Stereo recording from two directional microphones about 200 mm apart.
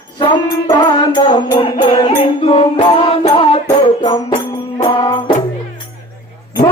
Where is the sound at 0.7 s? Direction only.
20° left (ahead or behind).